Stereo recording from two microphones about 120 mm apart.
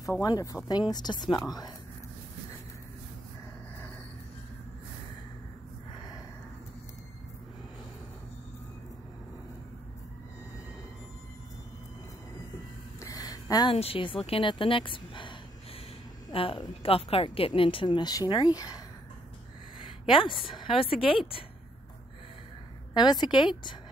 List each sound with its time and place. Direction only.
0.2 s a woman's voice: 30° left (ahead or behind)
13.0 s a sound: 30° left (ahead or behind)
13.7 s a woman's voice: 50° left (ahead or behind); by 18.8 s 30° left (ahead or behind)
20.1 s a woman's voice: 45° left (ahead or behind)
22.9 s a woman's voice: 35° left (ahead or behind)